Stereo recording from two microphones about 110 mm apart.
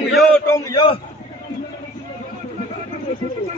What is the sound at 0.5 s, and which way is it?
Speech, 30° left (ahead or behind).